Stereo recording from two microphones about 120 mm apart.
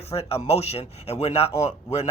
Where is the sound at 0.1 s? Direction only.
60° left (ahead or behind).